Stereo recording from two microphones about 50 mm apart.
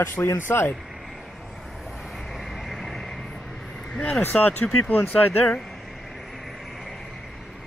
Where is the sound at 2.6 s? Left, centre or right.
Centre.